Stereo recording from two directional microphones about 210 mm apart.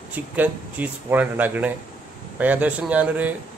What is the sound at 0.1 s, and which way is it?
Speech, 10° right (ahead or behind).